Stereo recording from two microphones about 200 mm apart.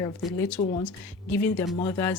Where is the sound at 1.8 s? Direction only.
15° left (ahead or behind).